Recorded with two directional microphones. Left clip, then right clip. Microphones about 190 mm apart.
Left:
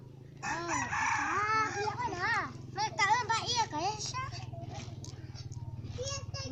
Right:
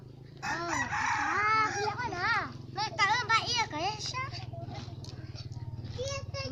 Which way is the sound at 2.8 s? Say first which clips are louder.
Right 1 dB; 15° right (ahead or behind).